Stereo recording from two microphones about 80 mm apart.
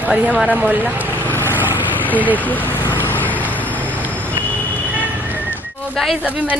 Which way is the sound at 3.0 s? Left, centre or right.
Left.